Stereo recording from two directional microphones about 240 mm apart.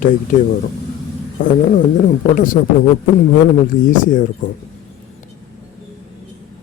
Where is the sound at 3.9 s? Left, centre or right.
Left.